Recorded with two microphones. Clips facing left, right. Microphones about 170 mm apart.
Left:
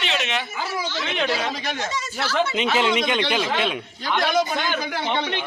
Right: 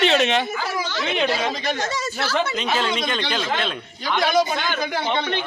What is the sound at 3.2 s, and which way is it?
Speech, 5° left (ahead or behind).